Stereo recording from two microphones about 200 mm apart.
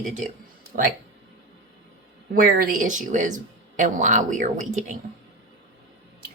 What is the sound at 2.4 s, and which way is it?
Speech, 45° right (ahead or behind).